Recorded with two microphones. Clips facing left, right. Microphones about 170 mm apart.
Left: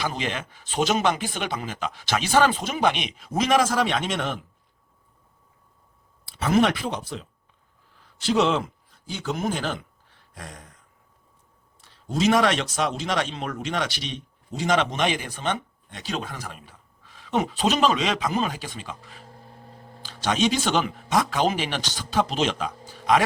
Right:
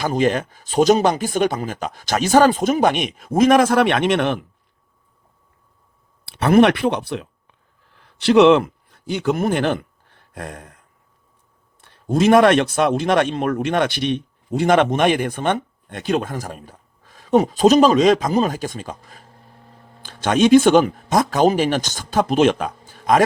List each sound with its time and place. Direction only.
0.0 s a man's voice: 45° right (ahead or behind); by 4.4 s 65° right (ahead or behind)
6.2 s speech: 65° right (ahead or behind)
11.8 s a man's voice: 55° right (ahead or behind)